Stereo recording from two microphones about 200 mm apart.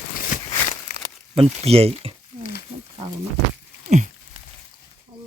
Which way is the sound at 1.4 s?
30° right (ahead or behind).